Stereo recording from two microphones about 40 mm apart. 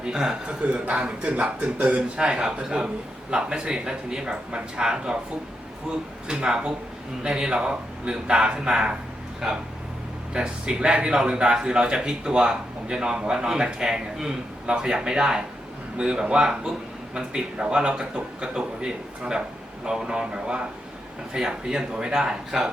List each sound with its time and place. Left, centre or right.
0.0 s a man's voice: centre
0.6 s speech: right
2.1 s a man's voice: centre
6.2 s a man's voice: right
10.3 s a man's voice: right